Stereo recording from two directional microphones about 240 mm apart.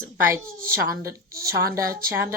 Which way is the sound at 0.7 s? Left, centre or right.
Centre.